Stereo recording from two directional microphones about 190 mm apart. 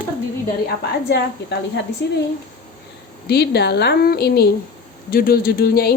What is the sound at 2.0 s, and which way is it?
Speech, 65° left (ahead or behind).